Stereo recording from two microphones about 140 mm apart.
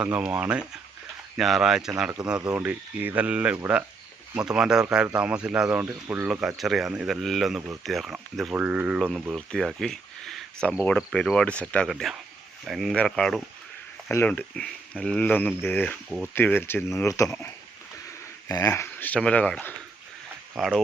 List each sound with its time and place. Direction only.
0.0 s speech: 10° right (ahead or behind)
6.6 s speech: centre (ahead or behind)
14.1 s speech: 15° left (ahead or behind)
16.0 s speech: 5° right (ahead or behind)
16.3 s speech: 15° left (ahead or behind)
18.4 s speech: 25° left (ahead or behind)
20.6 s speech: centre (ahead or behind)